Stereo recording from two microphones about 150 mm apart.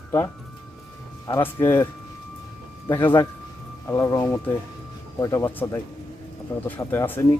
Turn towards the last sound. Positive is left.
turn(degrees=15)  # may be behind; listen again after turning